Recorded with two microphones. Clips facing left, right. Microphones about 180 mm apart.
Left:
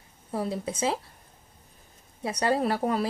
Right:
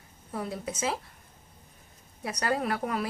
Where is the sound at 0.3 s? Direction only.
30° left (ahead or behind).